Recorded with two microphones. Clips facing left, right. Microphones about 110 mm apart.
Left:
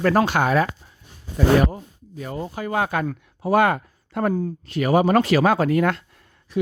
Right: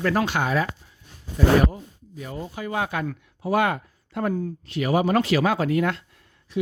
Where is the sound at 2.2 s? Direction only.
50° left (ahead or behind).